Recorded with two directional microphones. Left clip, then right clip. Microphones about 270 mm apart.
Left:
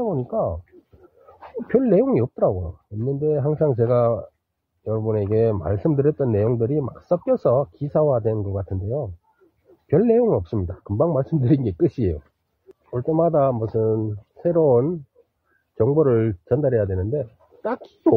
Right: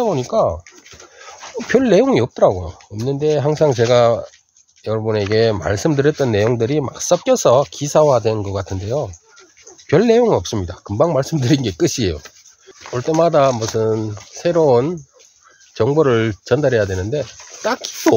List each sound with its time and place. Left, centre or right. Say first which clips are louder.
0.0 s speech: right 7 dB; right
1.7 s speech: right 5 dB; centre
2.5 s speech: right 5 dB; right
3.2 s speech: right 6 dB; centre